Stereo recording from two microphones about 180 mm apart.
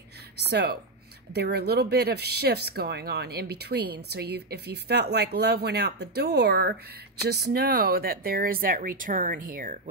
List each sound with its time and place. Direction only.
0.5 s speech: 65° right (ahead or behind)